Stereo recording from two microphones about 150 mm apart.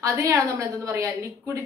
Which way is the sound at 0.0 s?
20° right (ahead or behind).